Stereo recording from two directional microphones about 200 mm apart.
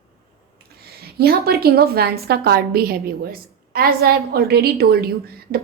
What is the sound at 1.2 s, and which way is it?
A woman's voice, 50° right (ahead or behind).